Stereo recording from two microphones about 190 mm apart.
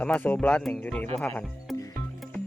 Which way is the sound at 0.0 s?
5° left (ahead or behind).